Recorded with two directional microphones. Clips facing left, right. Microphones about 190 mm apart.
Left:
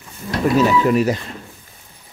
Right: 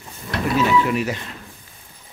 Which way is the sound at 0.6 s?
40° left (ahead or behind).